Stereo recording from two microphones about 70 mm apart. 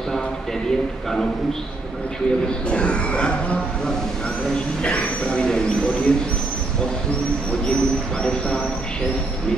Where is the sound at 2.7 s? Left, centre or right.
Centre.